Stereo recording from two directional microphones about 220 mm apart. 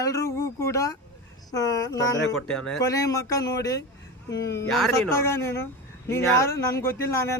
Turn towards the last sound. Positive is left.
turn(degrees=10)  # may be behind; listen again after turning